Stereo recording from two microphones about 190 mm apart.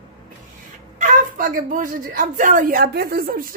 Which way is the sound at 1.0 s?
45° right (ahead or behind).